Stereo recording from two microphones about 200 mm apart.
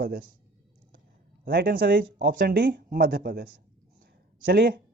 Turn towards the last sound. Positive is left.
turn(degrees=-50)  # may be behind; listen again after turning